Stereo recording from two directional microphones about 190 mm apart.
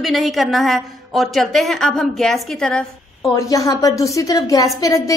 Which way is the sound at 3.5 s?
20° left (ahead or behind).